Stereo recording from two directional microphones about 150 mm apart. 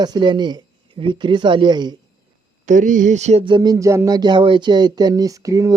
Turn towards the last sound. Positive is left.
turn(degrees=-20)  # may be behind; listen again after turning